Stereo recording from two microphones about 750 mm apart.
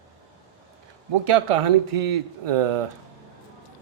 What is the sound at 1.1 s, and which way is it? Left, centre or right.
Speech, right.